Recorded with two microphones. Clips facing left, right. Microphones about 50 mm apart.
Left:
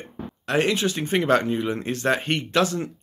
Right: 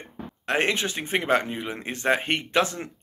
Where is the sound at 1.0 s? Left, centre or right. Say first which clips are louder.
Left 2 dB; centre.